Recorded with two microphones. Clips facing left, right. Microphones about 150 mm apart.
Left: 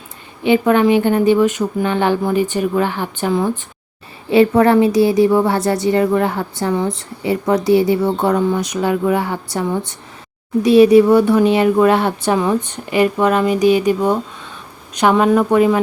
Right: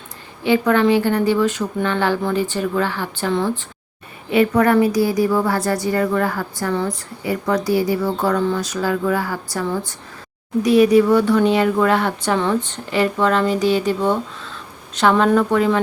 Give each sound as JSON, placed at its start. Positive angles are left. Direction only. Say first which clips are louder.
{"t": 0.4, "sound": "speech", "louder": "left 3 dB", "side_deg": 20}
{"t": 4.3, "sound": "a woman's voice", "louder": "left 4 dB", "side_deg": 30}
{"t": 15.1, "sound": "speech", "louder": "left 2 dB", "side_deg": 0}
{"t": 15.4, "sound": "speech", "louder": "left 3 dB", "side_deg": 15}